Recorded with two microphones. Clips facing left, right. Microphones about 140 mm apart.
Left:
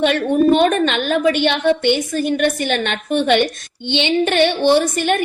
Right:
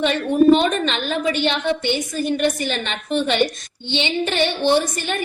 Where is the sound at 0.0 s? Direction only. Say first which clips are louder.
Left 1 dB; 55° left (ahead or behind).